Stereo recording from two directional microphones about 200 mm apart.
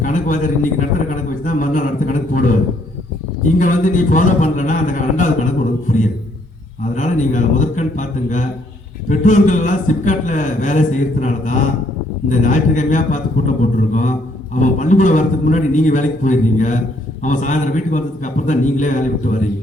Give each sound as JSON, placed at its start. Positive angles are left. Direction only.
{"t": 0.0, "sound": "a man's voice", "side_deg": 40}
{"t": 3.6, "sound": "a man's voice", "side_deg": 40}
{"t": 5.9, "sound": "a sound", "side_deg": 40}
{"t": 6.9, "sound": "a man's voice", "side_deg": 40}